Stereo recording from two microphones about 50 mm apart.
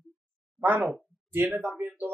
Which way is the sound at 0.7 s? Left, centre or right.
Right.